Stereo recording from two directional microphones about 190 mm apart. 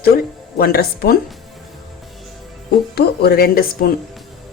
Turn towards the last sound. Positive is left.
turn(degrees=50)  # may be behind; listen again after turning